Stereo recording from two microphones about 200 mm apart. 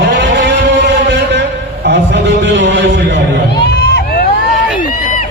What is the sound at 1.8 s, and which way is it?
A man's voice, 60° right (ahead or behind).